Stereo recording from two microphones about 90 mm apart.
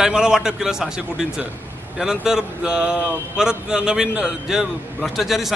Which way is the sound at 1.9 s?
5° right (ahead or behind).